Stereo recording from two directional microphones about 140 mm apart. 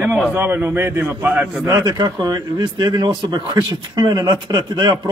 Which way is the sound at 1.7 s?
30° right (ahead or behind).